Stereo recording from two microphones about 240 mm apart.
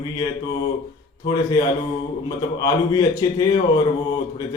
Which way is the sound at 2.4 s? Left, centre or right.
Centre.